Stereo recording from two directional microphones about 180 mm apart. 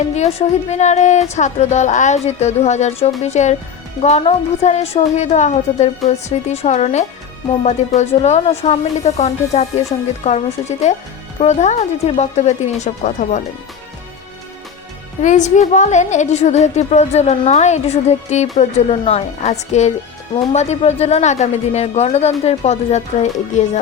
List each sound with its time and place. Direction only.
0.2 s a woman's voice: 35° left (ahead or behind)
15.2 s a woman's voice: 40° left (ahead or behind)